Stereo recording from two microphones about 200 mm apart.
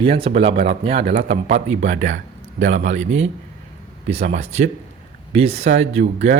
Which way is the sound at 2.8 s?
35° right (ahead or behind).